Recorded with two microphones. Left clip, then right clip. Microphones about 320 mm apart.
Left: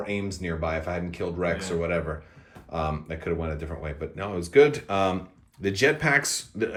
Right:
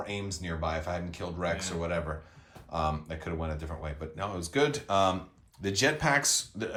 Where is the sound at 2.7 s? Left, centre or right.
Centre.